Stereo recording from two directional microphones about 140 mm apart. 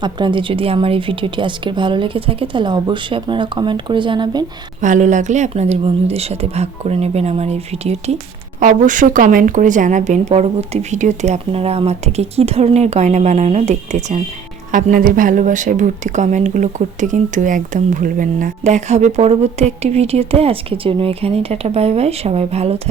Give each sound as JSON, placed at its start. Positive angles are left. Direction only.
{"t": 0.0, "sound": "a woman's voice", "side_deg": -35}
{"t": 4.8, "sound": "speech", "side_deg": -65}
{"t": 8.6, "sound": "a woman's voice", "side_deg": -65}
{"t": 14.7, "sound": "a woman's voice", "side_deg": -75}